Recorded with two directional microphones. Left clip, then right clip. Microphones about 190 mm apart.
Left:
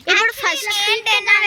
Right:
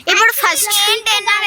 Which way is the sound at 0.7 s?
55° left (ahead or behind).